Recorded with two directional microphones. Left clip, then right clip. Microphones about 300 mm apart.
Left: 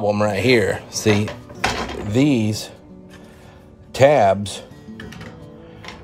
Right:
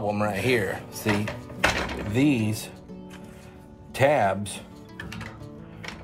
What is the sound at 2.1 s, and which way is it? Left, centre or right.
Speech, left.